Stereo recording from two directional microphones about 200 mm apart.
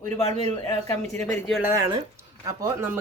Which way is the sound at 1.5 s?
5° right (ahead or behind).